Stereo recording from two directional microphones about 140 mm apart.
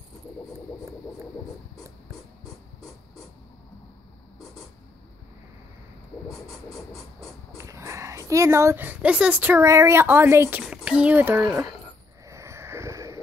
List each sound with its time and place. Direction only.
7.5 s speech: 20° right (ahead or behind)
10.6 s speech: 5° right (ahead or behind)
12.3 s a sound: 20° right (ahead or behind)